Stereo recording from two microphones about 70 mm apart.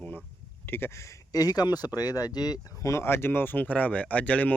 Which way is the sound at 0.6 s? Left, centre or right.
Left.